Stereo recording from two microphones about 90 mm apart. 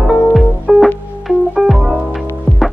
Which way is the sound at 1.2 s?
Centre (ahead or behind).